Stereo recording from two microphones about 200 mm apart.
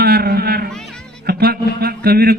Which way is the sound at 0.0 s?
50° right (ahead or behind).